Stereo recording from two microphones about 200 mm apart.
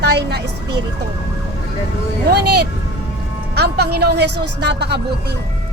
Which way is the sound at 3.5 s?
55° right (ahead or behind).